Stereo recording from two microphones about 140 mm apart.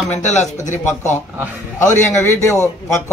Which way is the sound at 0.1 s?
55° left (ahead or behind).